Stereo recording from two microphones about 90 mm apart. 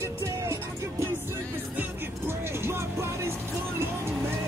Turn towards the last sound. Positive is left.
turn(degrees=-30)  # may be behind; listen again after turning